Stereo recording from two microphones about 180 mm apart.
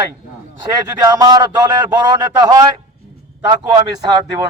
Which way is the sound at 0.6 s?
20° right (ahead or behind).